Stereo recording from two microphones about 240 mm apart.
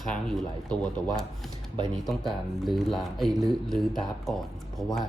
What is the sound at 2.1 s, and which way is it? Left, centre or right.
Speech, centre.